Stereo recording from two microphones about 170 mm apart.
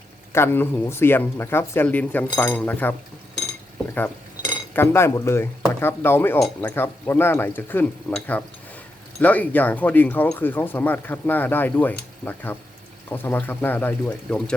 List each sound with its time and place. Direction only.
0.3 s speech: 15° left (ahead or behind)
3.9 s speech: 10° left (ahead or behind)